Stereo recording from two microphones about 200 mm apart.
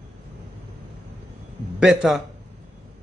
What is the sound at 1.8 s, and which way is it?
Speech, centre (ahead or behind).